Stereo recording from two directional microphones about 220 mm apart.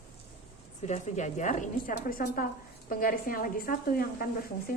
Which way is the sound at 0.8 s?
30° left (ahead or behind).